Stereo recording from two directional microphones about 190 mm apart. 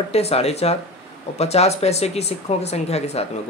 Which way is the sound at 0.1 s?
30° left (ahead or behind).